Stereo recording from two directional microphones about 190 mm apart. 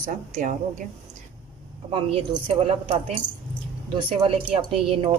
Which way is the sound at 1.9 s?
30° right (ahead or behind).